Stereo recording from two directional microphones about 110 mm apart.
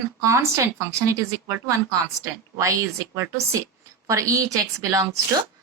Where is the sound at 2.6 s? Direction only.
25° right (ahead or behind).